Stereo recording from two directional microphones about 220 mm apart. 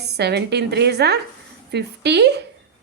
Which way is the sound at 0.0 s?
50° right (ahead or behind).